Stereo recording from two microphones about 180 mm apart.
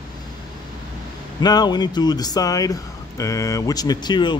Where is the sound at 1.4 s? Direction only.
20° left (ahead or behind).